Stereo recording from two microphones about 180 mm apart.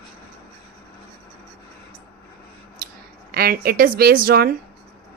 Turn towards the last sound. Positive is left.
turn(degrees=-55)  # may be behind; listen again after turning